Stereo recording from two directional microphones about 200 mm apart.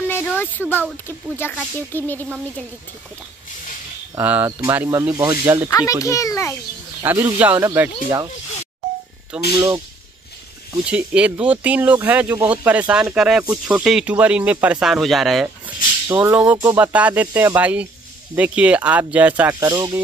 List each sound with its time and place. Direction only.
0.3 s speech: 10° left (ahead or behind)
4.1 s speech: 10° right (ahead or behind)
5.7 s speech: 15° left (ahead or behind)
7.0 s speech: 10° right (ahead or behind)
9.3 s speech: 5° right (ahead or behind)
10.9 s speech: 5° right (ahead or behind)